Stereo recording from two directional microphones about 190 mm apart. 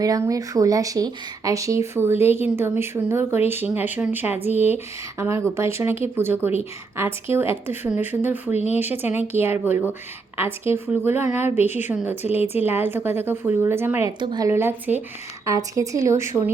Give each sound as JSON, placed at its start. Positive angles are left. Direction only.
{"t": 0.0, "sound": "speech", "side_deg": -20}
{"t": 4.4, "sound": "speech", "side_deg": 35}
{"t": 5.2, "sound": "speech", "side_deg": -15}
{"t": 8.5, "sound": "speech", "side_deg": 35}
{"t": 8.8, "sound": "speech", "side_deg": -10}